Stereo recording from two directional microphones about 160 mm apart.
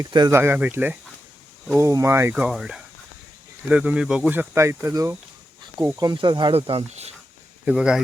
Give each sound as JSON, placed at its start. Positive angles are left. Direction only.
{"t": 0.0, "sound": "speech", "side_deg": -25}
{"t": 0.3, "sound": "speech", "side_deg": -10}
{"t": 2.3, "sound": "speech", "side_deg": -5}
{"t": 7.6, "sound": "speech", "side_deg": -5}